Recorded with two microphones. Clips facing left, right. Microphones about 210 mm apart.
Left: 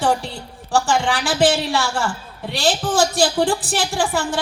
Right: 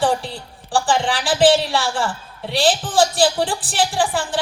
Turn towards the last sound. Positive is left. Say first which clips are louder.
# even
turn(degrees=45)  # may be behind; listen again after turning